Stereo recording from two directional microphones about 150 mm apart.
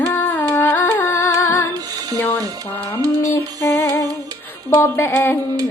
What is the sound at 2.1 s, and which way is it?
Speech, 20° left (ahead or behind).